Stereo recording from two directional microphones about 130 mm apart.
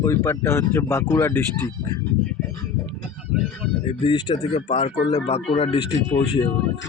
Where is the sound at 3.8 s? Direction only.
50° left (ahead or behind).